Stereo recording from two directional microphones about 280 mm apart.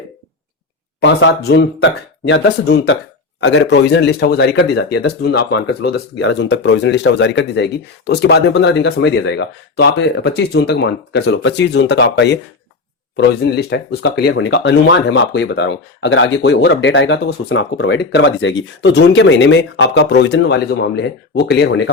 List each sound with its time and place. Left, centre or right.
0.9 s speech: left